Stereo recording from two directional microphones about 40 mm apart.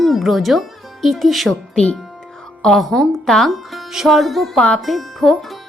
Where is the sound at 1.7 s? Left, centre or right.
Left.